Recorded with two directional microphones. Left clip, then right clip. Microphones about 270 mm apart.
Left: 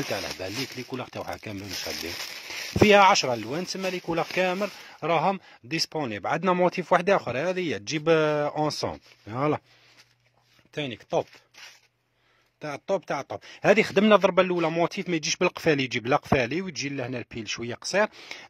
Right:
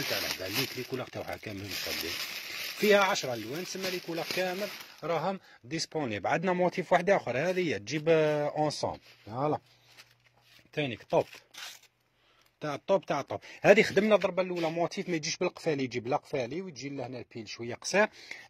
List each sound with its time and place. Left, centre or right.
0.2 s speech: centre
2.9 s speech: left
10.7 s speech: centre
12.5 s speech: centre